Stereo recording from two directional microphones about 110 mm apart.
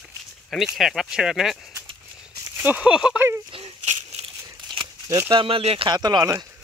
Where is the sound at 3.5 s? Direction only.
55° right (ahead or behind).